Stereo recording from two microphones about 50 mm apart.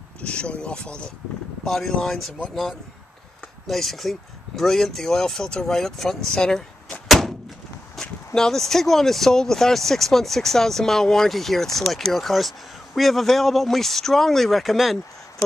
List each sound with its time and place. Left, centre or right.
0.2 s speech: left
1.6 s speech: centre
3.6 s speech: centre
7.1 s door: centre
8.4 s speech: centre